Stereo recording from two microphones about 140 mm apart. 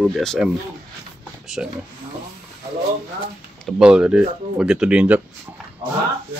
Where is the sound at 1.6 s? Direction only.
5° right (ahead or behind).